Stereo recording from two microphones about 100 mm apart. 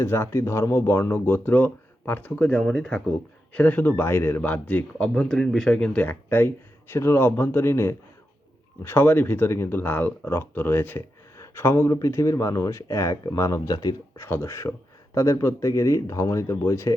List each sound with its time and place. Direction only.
0.0 s speech: 25° left (ahead or behind)
14.2 s speech: 25° left (ahead or behind)